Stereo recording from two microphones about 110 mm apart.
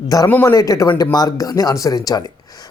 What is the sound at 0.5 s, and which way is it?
Speech, 30° left (ahead or behind).